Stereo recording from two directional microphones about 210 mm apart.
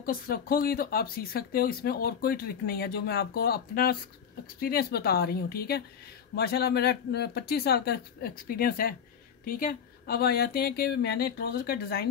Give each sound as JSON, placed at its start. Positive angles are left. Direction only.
{"t": 0.0, "sound": "speech", "side_deg": 45}